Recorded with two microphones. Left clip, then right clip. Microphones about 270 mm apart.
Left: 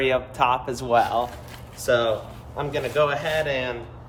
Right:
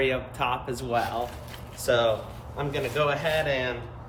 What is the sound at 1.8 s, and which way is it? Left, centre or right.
Speech, centre.